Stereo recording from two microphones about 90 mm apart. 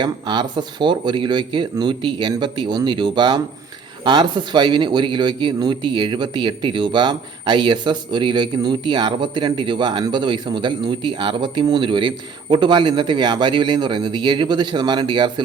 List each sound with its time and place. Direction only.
0.0 s a man's voice: 55° right (ahead or behind)